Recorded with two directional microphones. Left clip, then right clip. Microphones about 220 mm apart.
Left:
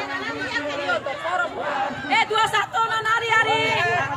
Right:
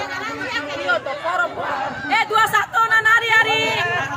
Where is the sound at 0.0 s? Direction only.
25° right (ahead or behind).